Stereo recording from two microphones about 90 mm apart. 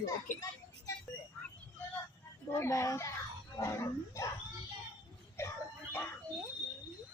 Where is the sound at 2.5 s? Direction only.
30° left (ahead or behind).